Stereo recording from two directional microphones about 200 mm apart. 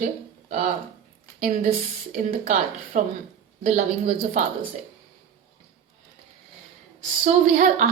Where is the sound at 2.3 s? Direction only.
40° right (ahead or behind).